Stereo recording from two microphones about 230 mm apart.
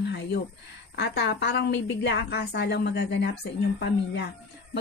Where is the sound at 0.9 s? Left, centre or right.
Left.